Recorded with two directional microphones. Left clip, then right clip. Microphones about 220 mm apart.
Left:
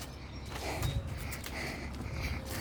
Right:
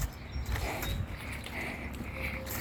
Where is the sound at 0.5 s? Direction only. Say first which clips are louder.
Right 2 dB; 15° right (ahead or behind).